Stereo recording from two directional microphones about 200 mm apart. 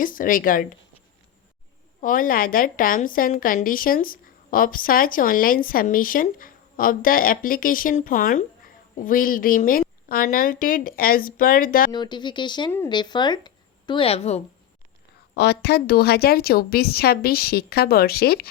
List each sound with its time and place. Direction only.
0.0 s a woman's voice: 45° left (ahead or behind)
2.0 s a woman's voice: 45° left (ahead or behind)
11.9 s a woman's voice: 20° left (ahead or behind)
15.4 s a woman's voice: 55° left (ahead or behind)